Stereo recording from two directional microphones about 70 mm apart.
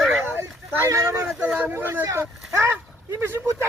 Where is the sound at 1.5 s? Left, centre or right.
Right.